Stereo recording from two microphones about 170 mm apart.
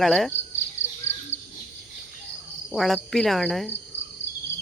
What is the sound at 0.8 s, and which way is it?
Cricket, 45° left (ahead or behind).